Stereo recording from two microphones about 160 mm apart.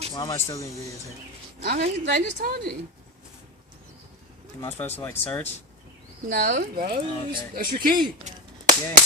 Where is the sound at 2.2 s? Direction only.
85° right.